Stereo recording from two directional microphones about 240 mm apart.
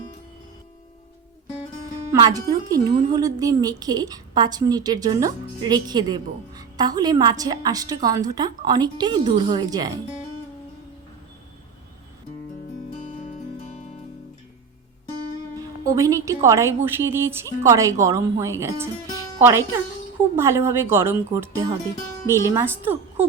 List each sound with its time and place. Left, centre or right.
2.1 s speech: centre
15.9 s speech: centre